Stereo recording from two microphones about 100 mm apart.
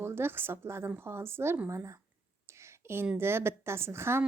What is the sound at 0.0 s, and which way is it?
Speech, 25° right (ahead or behind).